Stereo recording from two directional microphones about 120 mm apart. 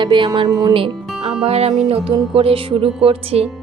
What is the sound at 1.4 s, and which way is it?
Speech, 60° right (ahead or behind).